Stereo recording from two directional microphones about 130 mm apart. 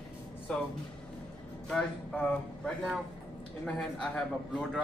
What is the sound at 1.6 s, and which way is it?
Speech, 5° left (ahead or behind).